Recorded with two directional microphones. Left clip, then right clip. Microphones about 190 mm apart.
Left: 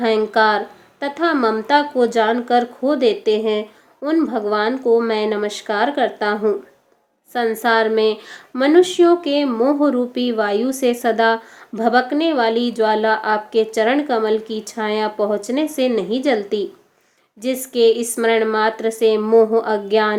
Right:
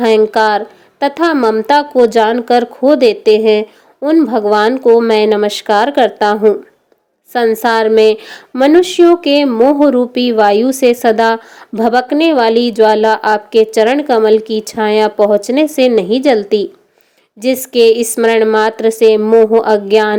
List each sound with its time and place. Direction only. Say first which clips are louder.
0.0 s a woman's voice: right 6 dB; 40° right (ahead or behind)